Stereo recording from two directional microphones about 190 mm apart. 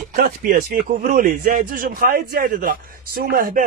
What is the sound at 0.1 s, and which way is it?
A man's voice, 50° right (ahead or behind).